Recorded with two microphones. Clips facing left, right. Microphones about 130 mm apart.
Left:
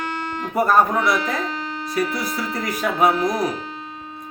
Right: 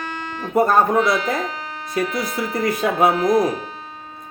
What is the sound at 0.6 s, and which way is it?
Speech, 25° right (ahead or behind).